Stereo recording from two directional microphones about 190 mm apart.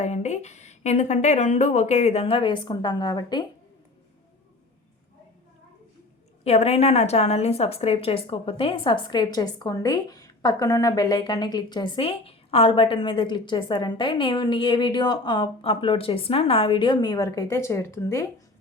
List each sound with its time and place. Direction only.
0.0 s speech: 40° left (ahead or behind); by 3.4 s 20° left (ahead or behind)
6.4 s a woman's voice: 35° left (ahead or behind); by 18.3 s 15° left (ahead or behind)